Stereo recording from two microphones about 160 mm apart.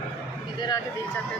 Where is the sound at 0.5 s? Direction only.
25° left (ahead or behind).